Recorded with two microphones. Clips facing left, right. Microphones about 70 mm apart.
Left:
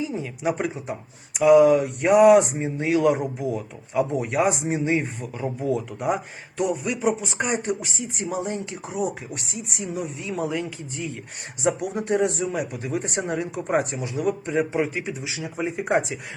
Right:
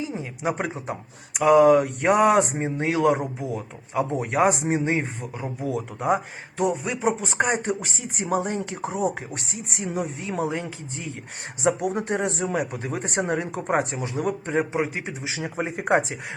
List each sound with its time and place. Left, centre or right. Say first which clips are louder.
0.1 s speech: left 2 dB; right
7.2 s speech: right 2 dB; right